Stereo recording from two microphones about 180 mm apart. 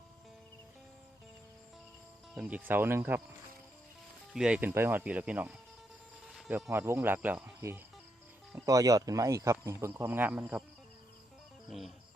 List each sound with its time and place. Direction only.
2.3 s speech: 5° right (ahead or behind)
4.4 s speech: 5° right (ahead or behind)
6.3 s a sound: centre (ahead or behind)
6.7 s speech: 15° right (ahead or behind)